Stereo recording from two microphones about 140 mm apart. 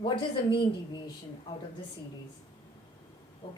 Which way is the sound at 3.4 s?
40° left (ahead or behind).